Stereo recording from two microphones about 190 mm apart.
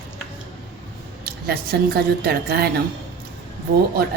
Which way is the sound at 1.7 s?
55° right (ahead or behind).